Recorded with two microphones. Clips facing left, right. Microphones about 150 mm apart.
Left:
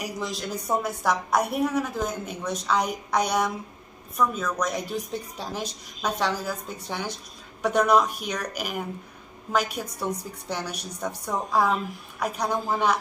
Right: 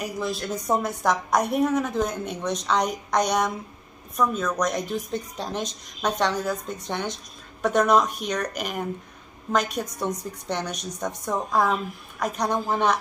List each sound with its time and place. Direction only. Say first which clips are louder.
0.0 s a woman's voice: right 3 dB; 15° left (ahead or behind)